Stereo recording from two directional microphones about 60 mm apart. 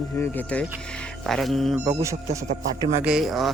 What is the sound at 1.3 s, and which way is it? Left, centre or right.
Speech, centre.